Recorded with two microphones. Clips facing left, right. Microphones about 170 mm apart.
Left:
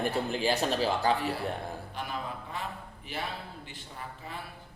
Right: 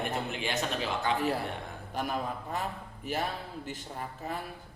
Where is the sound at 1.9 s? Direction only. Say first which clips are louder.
Right 7 dB; 45° right (ahead or behind).